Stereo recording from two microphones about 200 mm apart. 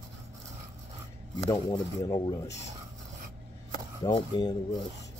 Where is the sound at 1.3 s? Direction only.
25° left (ahead or behind).